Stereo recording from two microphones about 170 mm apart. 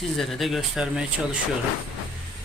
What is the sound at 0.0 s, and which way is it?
Speech, centre (ahead or behind).